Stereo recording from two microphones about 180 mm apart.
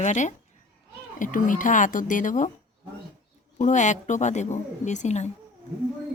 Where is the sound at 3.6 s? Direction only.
40° left (ahead or behind).